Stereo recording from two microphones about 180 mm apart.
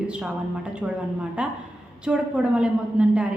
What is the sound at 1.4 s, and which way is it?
A woman's voice, 5° right (ahead or behind).